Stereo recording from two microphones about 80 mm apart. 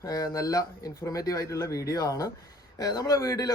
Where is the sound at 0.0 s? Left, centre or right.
Left.